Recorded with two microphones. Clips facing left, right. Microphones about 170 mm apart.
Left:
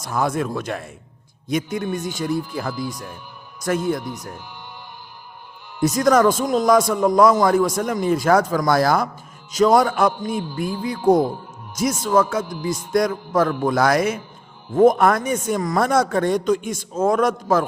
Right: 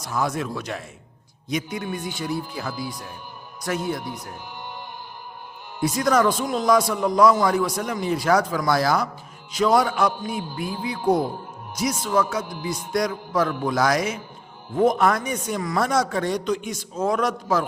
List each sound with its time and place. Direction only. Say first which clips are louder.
0.0 s a man's voice: left 3 dB; 50° left (ahead or behind)
5.8 s a man's voice: left 4 dB; 45° left (ahead or behind)